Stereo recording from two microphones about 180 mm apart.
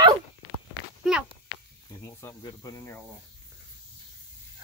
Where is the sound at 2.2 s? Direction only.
20° left (ahead or behind).